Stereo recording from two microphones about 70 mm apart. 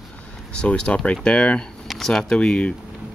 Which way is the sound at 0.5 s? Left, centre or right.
Centre.